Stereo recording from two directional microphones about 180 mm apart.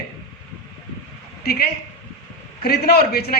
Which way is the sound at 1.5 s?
60° left (ahead or behind).